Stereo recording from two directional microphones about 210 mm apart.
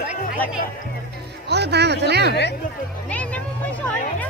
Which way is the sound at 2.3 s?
55° left (ahead or behind).